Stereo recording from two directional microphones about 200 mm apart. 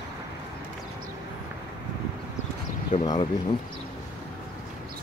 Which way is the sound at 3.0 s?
20° left (ahead or behind).